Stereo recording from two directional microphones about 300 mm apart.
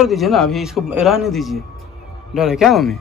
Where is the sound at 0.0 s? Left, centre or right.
Centre.